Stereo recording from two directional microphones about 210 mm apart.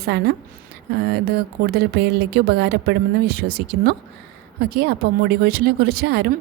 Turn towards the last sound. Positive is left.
turn(degrees=-50)  # may be behind; listen again after turning